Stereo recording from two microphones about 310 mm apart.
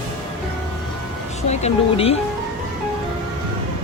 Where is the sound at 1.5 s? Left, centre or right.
Centre.